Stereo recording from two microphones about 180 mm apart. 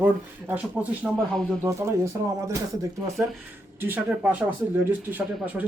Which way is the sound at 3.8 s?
10° right (ahead or behind).